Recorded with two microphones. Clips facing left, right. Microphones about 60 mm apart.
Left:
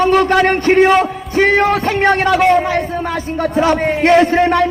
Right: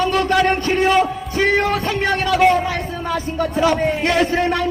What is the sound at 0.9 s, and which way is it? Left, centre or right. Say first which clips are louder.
A man's voice: left 4 dB; left.